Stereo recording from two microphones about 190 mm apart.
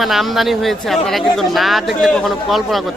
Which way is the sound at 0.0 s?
Centre (ahead or behind).